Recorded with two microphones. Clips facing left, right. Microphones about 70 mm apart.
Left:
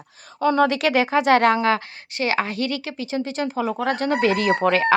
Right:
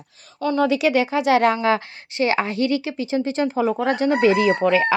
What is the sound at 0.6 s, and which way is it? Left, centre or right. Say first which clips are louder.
Speech: right 1 dB; left.